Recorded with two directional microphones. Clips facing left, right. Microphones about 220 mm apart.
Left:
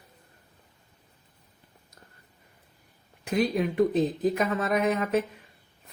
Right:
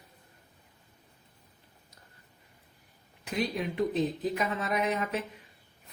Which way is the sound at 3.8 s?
50° left (ahead or behind).